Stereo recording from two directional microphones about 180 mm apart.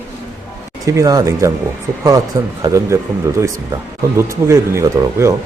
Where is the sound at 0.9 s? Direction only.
20° right (ahead or behind).